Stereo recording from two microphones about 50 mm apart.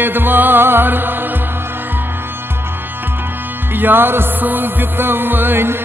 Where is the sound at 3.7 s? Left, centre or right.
Right.